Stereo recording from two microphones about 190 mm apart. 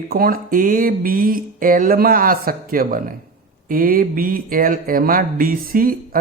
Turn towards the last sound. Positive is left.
turn(degrees=-50)  # may be behind; listen again after turning